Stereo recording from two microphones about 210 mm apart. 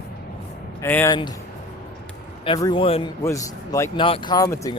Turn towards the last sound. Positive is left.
turn(degrees=15)  # may be behind; listen again after turning